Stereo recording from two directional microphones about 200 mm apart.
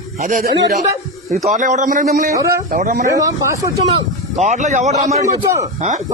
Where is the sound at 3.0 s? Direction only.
15° right (ahead or behind).